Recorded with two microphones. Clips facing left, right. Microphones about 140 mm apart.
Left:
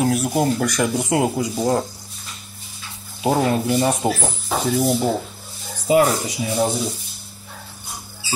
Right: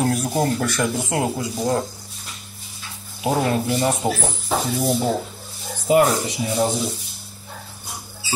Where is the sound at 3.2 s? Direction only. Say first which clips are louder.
Left 2 dB; 20° left (ahead or behind).